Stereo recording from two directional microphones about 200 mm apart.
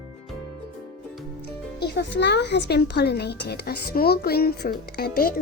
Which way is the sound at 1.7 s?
55° left (ahead or behind).